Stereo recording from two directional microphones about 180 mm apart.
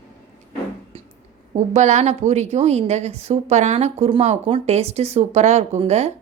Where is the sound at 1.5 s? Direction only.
40° right (ahead or behind).